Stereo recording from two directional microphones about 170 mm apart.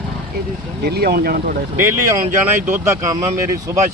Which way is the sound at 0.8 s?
70° right (ahead or behind).